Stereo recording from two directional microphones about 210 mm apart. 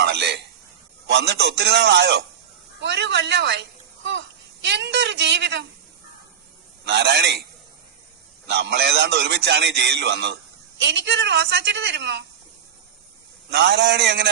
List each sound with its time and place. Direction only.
0.0 s a sound: 55° right (ahead or behind)
1.0 s a man's voice: 50° right (ahead or behind)
6.8 s a man's voice: 55° right (ahead or behind)
8.4 s a man's voice: 50° right (ahead or behind)
13.5 s a man's voice: 55° right (ahead or behind)